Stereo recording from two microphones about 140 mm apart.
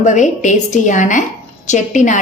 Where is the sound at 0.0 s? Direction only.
60° left (ahead or behind).